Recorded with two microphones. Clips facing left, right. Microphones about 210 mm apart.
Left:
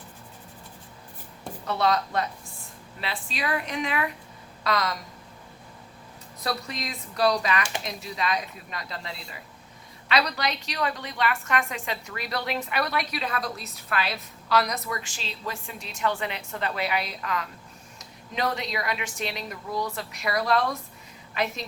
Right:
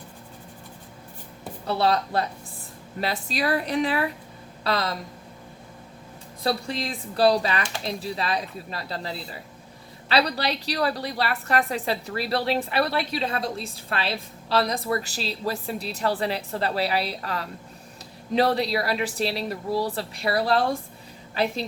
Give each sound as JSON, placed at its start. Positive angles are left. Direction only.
{"t": 1.6, "sound": "a woman's voice", "side_deg": -30}
{"t": 6.4, "sound": "a woman's voice", "side_deg": -30}